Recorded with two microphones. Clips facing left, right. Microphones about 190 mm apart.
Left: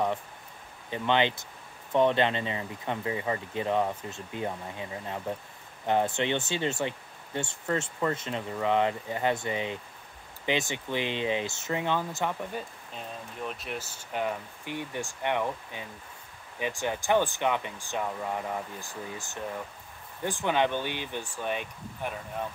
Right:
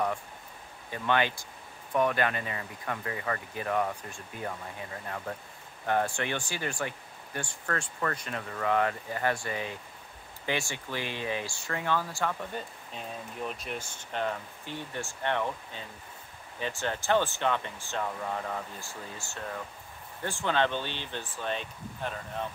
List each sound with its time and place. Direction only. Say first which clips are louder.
0.8 s speech: left 2 dB; 20° left (ahead or behind)
12.9 s speech: right 1 dB; centre (ahead or behind)